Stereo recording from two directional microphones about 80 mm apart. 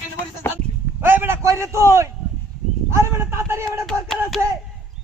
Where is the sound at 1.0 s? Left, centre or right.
Right.